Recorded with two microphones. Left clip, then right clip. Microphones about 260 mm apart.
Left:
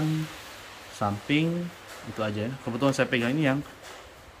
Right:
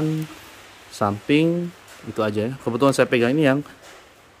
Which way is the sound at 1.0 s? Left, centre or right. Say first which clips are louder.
Right 7 dB; right.